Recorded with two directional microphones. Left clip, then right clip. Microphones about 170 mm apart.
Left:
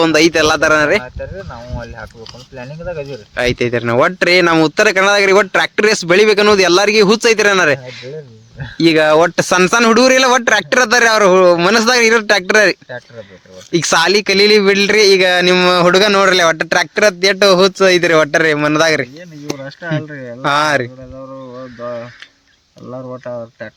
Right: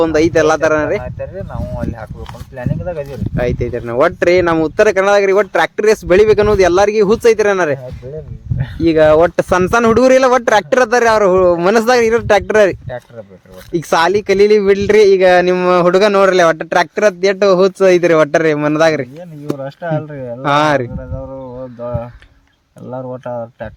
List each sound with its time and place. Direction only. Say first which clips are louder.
0.0 s speech: left 1 dB; 10° left (ahead or behind)
2.6 s speech: right 2 dB; 35° right (ahead or behind)
3.3 s speech: left 3 dB; 15° left (ahead or behind)
8.8 s a man's voice: right 1 dB; 15° left (ahead or behind)
13.7 s a man's voice: left 1 dB; 10° left (ahead or behind)
19.5 s speech: right 3 dB; 60° right (ahead or behind)
20.4 s a man's voice: right 1 dB; 5° right (ahead or behind)